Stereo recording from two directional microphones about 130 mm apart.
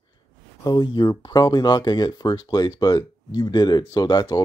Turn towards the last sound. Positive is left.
turn(degrees=35)  # may be behind; listen again after turning